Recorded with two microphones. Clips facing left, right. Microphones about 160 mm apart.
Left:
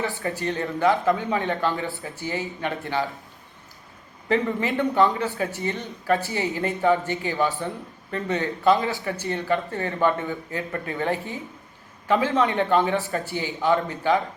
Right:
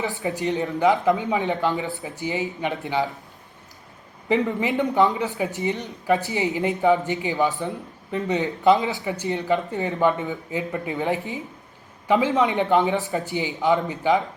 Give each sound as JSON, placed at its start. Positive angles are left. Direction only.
{"t": 0.0, "sound": "a man's voice", "side_deg": -20}
{"t": 4.3, "sound": "a man's voice", "side_deg": -15}